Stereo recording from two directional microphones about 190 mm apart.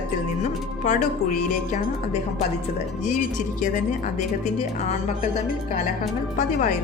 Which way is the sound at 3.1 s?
40° left (ahead or behind).